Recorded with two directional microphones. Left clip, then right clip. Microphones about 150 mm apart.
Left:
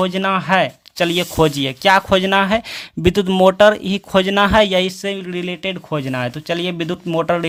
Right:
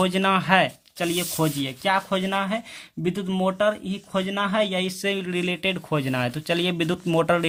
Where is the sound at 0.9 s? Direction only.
40° left (ahead or behind).